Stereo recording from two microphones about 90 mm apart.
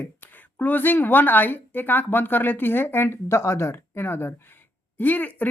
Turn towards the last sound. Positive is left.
turn(degrees=20)  # may be behind; listen again after turning